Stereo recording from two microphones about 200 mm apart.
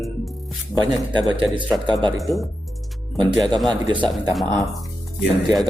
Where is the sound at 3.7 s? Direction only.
25° right (ahead or behind).